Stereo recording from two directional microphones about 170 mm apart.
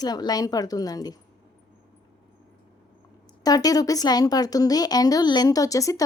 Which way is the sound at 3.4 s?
20° left (ahead or behind).